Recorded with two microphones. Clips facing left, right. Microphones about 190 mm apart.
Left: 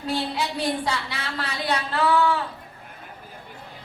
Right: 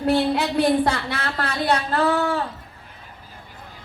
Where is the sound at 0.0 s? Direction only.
60° right (ahead or behind).